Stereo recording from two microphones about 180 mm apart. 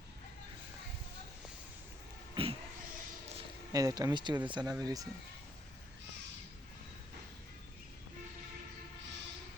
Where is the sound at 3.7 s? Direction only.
20° right (ahead or behind).